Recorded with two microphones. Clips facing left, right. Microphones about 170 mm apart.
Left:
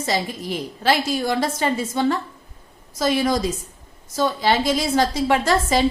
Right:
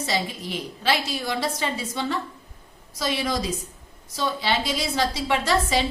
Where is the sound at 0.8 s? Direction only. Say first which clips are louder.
Left 5 dB; 45° left (ahead or behind).